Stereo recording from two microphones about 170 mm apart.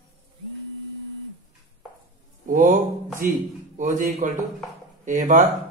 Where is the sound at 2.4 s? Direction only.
50° right (ahead or behind).